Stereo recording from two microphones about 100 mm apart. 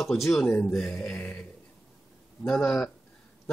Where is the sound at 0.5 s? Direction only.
15° left (ahead or behind).